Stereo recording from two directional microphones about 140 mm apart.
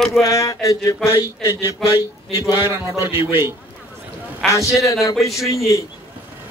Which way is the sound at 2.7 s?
20° right (ahead or behind).